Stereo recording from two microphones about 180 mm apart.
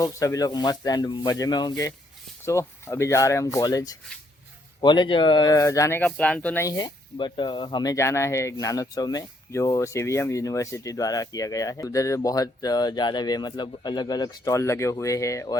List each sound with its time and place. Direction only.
0.0 s speech: 20° left (ahead or behind)